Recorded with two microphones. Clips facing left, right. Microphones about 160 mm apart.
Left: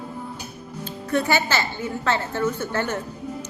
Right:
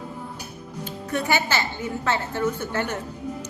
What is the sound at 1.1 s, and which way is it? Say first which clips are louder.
A woman's voice: left 2 dB; 15° right (ahead or behind).